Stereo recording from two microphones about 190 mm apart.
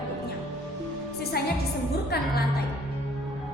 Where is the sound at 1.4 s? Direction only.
55° left (ahead or behind).